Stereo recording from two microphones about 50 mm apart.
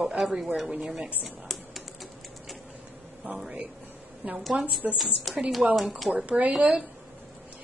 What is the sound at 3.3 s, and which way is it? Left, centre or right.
Speech, centre.